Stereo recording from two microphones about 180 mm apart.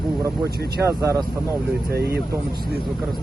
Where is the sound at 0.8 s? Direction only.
15° right (ahead or behind).